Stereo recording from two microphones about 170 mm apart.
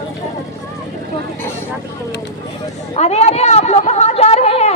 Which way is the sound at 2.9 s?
40° left (ahead or behind).